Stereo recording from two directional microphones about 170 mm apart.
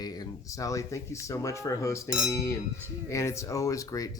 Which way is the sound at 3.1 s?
15° left (ahead or behind).